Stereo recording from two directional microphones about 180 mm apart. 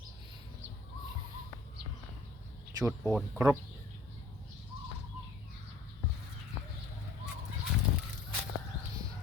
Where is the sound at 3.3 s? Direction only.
15° right (ahead or behind).